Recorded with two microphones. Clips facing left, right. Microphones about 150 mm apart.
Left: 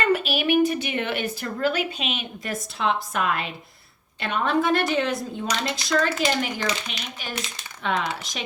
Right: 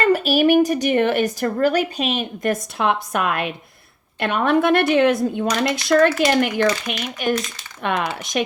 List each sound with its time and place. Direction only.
0.0 s a woman's voice: 40° right (ahead or behind)